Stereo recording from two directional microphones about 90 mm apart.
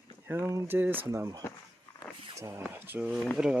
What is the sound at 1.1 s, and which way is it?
Speech, 35° right (ahead or behind).